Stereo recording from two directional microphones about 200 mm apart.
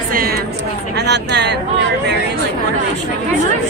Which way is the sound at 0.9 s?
55° right (ahead or behind).